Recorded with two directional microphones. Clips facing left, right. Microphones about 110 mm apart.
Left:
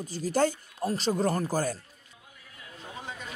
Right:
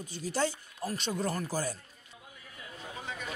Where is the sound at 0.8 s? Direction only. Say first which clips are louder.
Left 6 dB; 35° left (ahead or behind).